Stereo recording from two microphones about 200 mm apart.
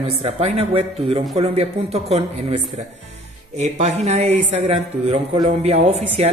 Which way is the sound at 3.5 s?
35° right (ahead or behind).